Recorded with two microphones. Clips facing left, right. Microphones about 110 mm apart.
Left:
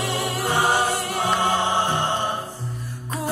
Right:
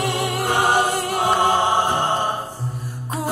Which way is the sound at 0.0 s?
15° right (ahead or behind).